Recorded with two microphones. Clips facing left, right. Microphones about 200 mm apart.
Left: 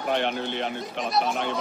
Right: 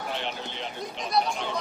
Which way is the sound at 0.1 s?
60° left (ahead or behind).